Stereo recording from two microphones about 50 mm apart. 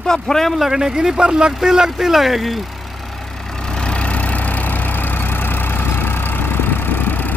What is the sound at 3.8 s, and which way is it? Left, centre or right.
Vehicle, left.